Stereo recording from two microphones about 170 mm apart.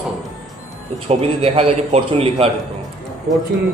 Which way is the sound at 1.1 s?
35° right (ahead or behind).